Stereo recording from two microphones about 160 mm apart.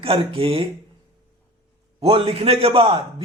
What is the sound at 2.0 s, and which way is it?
Speech, 35° right (ahead or behind).